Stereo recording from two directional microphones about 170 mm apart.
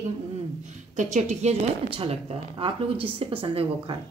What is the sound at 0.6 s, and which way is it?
Speech, 45° right (ahead or behind).